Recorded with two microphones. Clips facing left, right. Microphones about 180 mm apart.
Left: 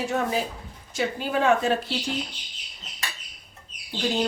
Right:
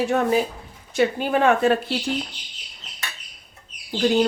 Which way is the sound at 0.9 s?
60° right (ahead or behind).